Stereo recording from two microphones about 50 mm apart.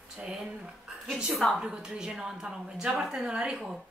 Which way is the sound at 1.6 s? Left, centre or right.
Centre.